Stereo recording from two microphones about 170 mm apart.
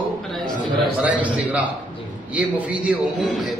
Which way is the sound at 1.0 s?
10° right (ahead or behind).